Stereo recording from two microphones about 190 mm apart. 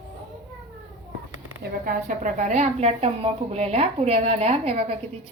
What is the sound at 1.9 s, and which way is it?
A woman's voice, 45° right (ahead or behind).